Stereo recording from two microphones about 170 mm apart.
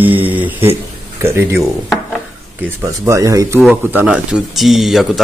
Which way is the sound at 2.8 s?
20° right (ahead or behind).